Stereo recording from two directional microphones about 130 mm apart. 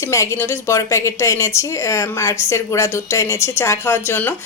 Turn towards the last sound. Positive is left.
turn(degrees=15)  # may be behind; listen again after turning